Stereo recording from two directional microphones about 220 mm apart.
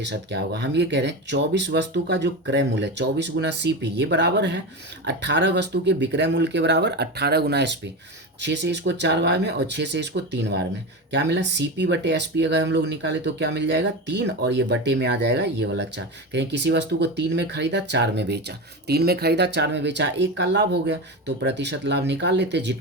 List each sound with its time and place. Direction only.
0.0 s speech: 50° right (ahead or behind)